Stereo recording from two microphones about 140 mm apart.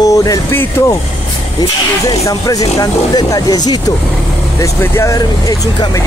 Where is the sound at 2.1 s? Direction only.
25° left (ahead or behind).